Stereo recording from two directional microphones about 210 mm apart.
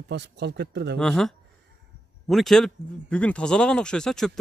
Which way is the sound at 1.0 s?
Centre (ahead or behind).